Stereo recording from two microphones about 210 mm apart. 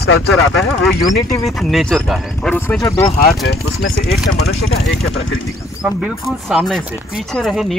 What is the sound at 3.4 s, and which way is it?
Speech, 60° left (ahead or behind).